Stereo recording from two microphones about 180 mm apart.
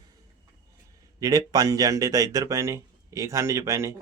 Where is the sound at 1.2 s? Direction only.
20° right (ahead or behind).